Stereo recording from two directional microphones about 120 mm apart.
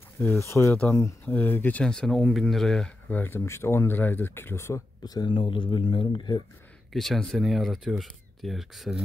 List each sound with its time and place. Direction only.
0.2 s speech: 20° left (ahead or behind); by 2.9 s 5° left (ahead or behind)
3.1 s speech: 15° left (ahead or behind)
5.0 s speech: 35° left (ahead or behind)
5.3 s speech: 45° left (ahead or behind)
6.9 s speech: centre (ahead or behind)